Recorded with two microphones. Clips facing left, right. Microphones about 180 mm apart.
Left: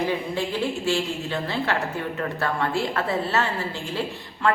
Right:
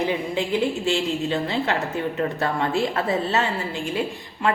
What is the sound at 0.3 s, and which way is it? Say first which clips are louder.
A woman's voice: right 3 dB; 20° right (ahead or behind).